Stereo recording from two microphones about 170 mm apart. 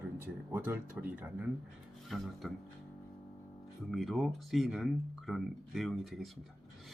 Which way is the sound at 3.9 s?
Centre (ahead or behind).